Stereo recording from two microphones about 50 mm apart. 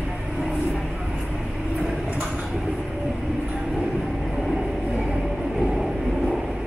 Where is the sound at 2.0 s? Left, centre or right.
Right.